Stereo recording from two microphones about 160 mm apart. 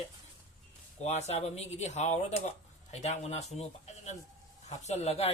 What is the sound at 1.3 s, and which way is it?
Speech, 40° left (ahead or behind).